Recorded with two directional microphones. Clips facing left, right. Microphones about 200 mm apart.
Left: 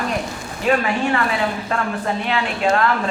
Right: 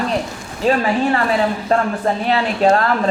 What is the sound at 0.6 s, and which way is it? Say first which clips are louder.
A man's voice: right 3 dB; 35° right (ahead or behind).